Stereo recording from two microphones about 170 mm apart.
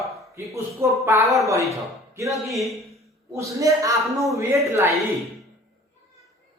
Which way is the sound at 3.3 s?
20° right (ahead or behind).